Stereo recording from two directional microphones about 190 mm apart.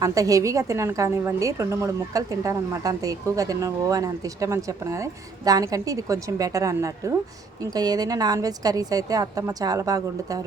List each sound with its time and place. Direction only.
0.0 s a woman's voice: 15° right (ahead or behind)